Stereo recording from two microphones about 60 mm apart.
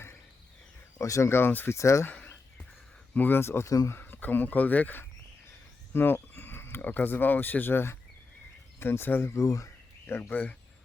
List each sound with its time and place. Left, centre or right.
0.9 s speech: left
1.3 s speech: left
1.7 s speech: left
2.0 s a sound: left
3.2 s speech: left
4.0 s speech: left
9.3 s speech: left
10.1 s speech: left